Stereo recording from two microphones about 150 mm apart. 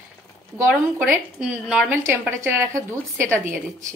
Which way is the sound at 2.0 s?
15° right (ahead or behind).